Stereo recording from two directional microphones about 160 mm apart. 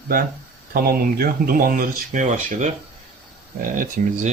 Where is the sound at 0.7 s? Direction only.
65° right (ahead or behind).